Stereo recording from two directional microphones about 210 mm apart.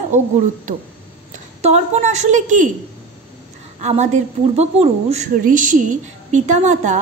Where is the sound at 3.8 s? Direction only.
35° right (ahead or behind).